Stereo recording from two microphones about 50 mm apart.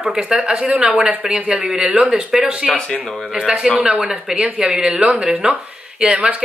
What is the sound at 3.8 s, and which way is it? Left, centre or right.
Speech, centre.